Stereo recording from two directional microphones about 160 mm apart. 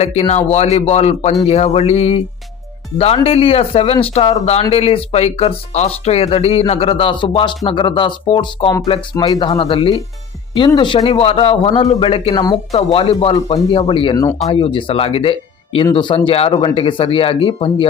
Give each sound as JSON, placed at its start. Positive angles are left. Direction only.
{"t": 0.0, "sound": "a man's voice", "side_deg": 45}
{"t": 3.2, "sound": "speech", "side_deg": 35}
{"t": 12.7, "sound": "speech", "side_deg": 35}